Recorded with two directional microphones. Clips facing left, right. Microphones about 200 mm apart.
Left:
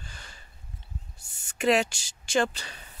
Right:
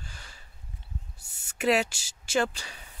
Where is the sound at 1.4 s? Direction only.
5° right (ahead or behind).